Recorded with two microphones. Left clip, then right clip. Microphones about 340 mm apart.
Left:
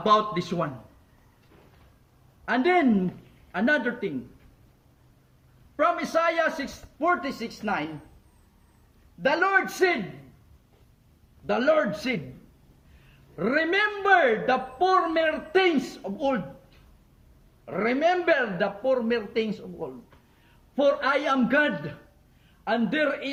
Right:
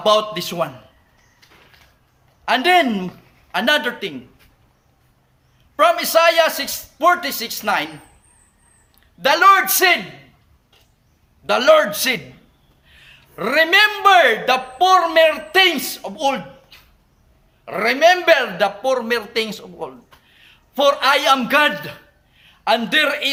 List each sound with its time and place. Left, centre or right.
0.0 s a man's voice: centre
2.5 s a man's voice: right
5.8 s a man's voice: right
9.2 s a man's voice: right
11.4 s a man's voice: right
17.7 s a man's voice: right